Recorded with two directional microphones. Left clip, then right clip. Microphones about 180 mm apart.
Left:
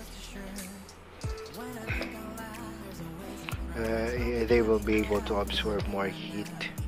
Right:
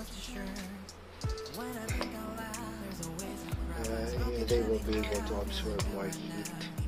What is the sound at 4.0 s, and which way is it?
Music, 20° left (ahead or behind).